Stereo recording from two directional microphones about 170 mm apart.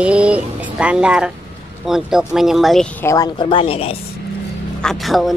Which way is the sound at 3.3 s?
30° left (ahead or behind).